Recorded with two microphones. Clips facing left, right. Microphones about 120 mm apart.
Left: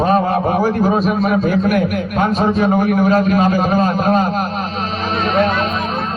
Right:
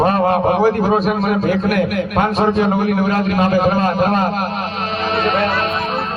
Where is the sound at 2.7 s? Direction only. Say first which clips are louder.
Left 2 dB; 45° left (ahead or behind).